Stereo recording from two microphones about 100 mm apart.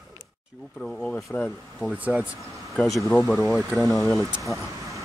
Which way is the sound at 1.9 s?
15° right (ahead or behind).